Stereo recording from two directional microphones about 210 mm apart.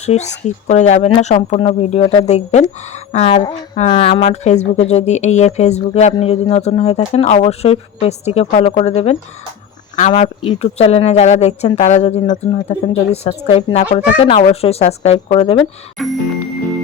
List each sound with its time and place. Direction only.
0.0 s speech: 30° left (ahead or behind)
9.9 s speech: 30° left (ahead or behind)